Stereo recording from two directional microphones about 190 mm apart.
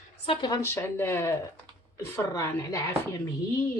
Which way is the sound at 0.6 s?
10° left (ahead or behind).